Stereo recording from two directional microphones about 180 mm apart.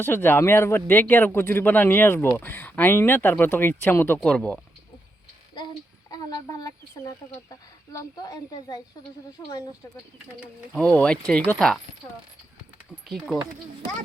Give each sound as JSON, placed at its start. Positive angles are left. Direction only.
{"t": 0.0, "sound": "speech", "side_deg": 10}
{"t": 5.5, "sound": "a sound", "side_deg": 25}
{"t": 7.9, "sound": "speech", "side_deg": 20}
{"t": 10.8, "sound": "speech", "side_deg": 5}
{"t": 13.1, "sound": "speech", "side_deg": 0}